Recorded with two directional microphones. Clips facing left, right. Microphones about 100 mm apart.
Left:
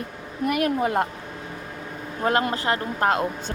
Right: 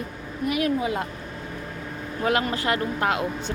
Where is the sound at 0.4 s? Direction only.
55° left (ahead or behind).